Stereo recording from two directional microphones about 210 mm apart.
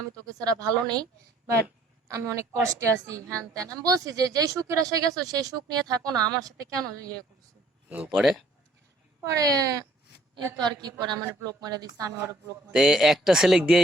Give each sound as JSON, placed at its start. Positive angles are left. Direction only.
{"t": 0.3, "sound": "a woman's voice", "side_deg": -15}
{"t": 7.9, "sound": "speech", "side_deg": -5}
{"t": 9.3, "sound": "a woman's voice", "side_deg": -15}
{"t": 12.7, "sound": "speech", "side_deg": 0}